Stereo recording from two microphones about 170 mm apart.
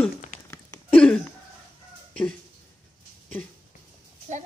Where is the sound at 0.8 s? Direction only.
5° left (ahead or behind).